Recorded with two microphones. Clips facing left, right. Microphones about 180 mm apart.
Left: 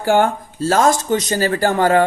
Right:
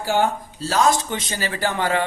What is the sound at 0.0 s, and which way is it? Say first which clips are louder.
Speech: left 5 dB; 55° left (ahead or behind).